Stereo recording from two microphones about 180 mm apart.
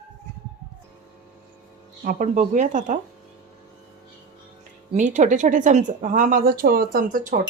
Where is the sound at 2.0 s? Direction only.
50° right (ahead or behind).